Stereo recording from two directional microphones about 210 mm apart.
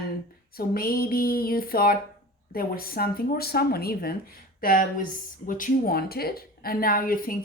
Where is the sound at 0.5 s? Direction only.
45° left (ahead or behind).